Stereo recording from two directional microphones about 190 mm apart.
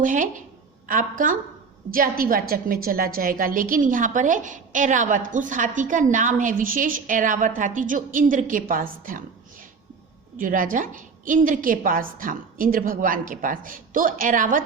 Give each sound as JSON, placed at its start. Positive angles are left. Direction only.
{"t": 0.0, "sound": "a woman's voice", "side_deg": -45}